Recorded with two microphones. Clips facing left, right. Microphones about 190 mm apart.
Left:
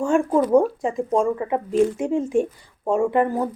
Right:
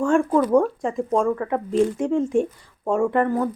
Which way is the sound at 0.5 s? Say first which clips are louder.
Left 1 dB; 10° left (ahead or behind).